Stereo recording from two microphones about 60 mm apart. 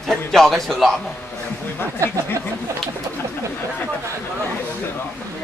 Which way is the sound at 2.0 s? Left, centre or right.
Right.